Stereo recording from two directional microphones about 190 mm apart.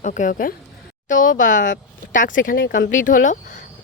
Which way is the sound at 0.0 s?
40° left (ahead or behind).